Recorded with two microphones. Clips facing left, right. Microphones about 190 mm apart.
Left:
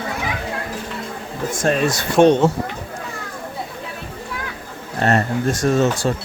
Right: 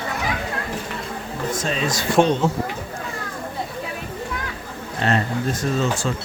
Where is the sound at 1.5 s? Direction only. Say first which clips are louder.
Left 8 dB; 55° left (ahead or behind).